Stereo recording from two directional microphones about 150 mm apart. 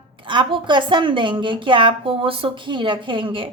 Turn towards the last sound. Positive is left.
turn(degrees=-35)  # may be behind; listen again after turning